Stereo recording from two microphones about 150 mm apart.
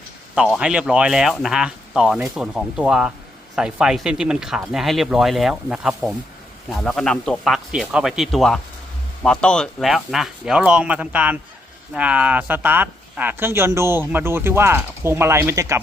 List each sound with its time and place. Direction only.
0.3 s speech: 5° right (ahead or behind)